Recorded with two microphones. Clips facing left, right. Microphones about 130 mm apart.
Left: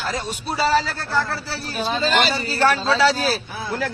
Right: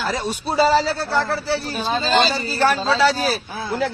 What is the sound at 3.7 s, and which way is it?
Speech, 20° right (ahead or behind).